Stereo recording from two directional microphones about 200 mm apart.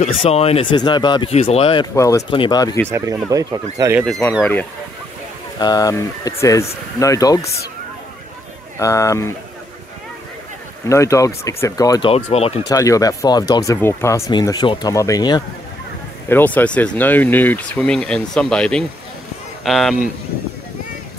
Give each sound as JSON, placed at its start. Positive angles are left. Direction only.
{"t": 0.2, "sound": "speech", "side_deg": 30}
{"t": 2.0, "sound": "speech", "side_deg": 15}
{"t": 2.9, "sound": "speech", "side_deg": -15}
{"t": 4.2, "sound": "speech", "side_deg": 15}
{"t": 8.7, "sound": "speech", "side_deg": 15}
{"t": 10.9, "sound": "speech", "side_deg": 15}
{"t": 12.1, "sound": "speech", "side_deg": 30}
{"t": 12.6, "sound": "speech", "side_deg": 15}
{"t": 16.3, "sound": "speech", "side_deg": 10}